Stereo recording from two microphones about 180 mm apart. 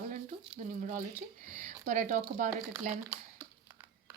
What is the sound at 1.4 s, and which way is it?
Speech, 45° right (ahead or behind).